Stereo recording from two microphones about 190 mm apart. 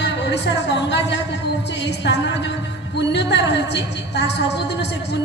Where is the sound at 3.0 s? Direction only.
65° left (ahead or behind).